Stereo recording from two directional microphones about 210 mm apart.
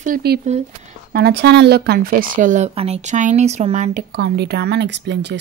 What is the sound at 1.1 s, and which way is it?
Speech, 50° right (ahead or behind).